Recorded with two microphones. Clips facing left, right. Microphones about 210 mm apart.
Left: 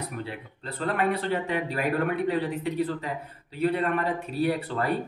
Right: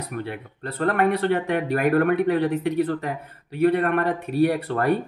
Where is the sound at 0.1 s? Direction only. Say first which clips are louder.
Right 5 dB; 55° right (ahead or behind).